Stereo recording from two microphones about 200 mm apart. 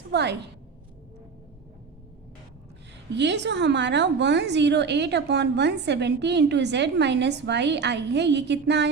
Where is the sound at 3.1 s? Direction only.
60° right (ahead or behind).